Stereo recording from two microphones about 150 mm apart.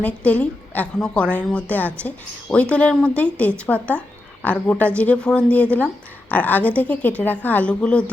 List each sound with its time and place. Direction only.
0.0 s a woman's voice: 10° left (ahead or behind)